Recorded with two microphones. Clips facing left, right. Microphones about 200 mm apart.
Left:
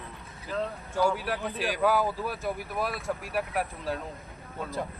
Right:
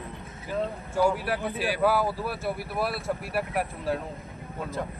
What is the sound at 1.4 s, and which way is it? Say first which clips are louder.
Speech: right 2 dB; 5° right (ahead or behind).